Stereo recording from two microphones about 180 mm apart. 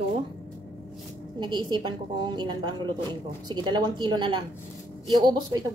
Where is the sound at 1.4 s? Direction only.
25° right (ahead or behind).